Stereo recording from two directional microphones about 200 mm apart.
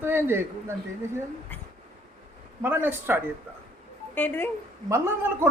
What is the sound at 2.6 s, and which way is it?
Speech, 10° right (ahead or behind).